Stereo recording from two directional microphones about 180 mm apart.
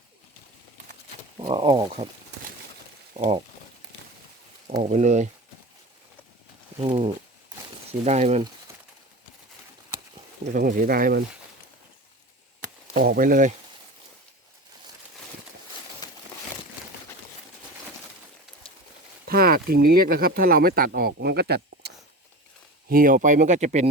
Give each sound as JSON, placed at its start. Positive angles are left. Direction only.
{"t": 1.4, "sound": "speech", "side_deg": -20}
{"t": 3.2, "sound": "speech", "side_deg": -35}
{"t": 4.8, "sound": "speech", "side_deg": -40}
{"t": 6.7, "sound": "speech", "side_deg": -30}
{"t": 10.4, "sound": "speech", "side_deg": -50}
{"t": 12.9, "sound": "speech", "side_deg": -55}
{"t": 19.3, "sound": "speech", "side_deg": -55}
{"t": 22.9, "sound": "speech", "side_deg": -50}